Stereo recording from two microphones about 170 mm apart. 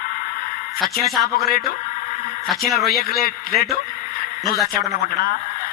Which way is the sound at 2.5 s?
Centre (ahead or behind).